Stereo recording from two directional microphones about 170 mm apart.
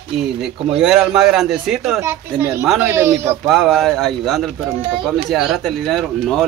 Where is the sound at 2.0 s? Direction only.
15° right (ahead or behind).